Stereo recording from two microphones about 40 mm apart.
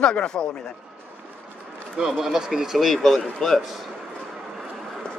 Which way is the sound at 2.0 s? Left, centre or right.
Centre.